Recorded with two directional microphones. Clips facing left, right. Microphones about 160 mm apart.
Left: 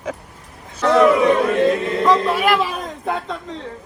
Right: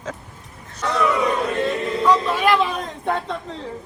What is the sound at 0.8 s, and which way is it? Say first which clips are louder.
Speech: left 8 dB; 75° left (ahead or behind).